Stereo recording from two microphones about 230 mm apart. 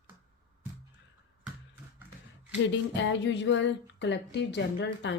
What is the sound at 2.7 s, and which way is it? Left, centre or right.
Music, left.